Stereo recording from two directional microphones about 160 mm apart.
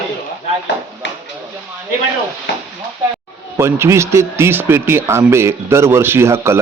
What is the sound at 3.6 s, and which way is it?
Speech, 15° right (ahead or behind).